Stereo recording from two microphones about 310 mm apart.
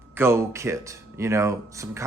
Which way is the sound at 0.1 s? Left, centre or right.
Centre.